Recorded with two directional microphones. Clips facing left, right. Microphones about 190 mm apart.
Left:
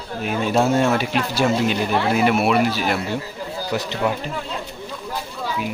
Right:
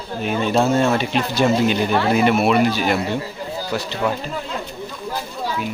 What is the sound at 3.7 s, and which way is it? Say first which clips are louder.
Speech: even; 20° left (ahead or behind).